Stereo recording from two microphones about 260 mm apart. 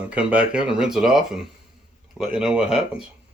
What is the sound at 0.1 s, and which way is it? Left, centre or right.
Speech, centre.